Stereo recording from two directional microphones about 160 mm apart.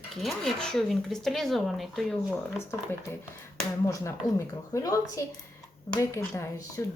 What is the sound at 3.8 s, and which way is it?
Speech, 20° left (ahead or behind).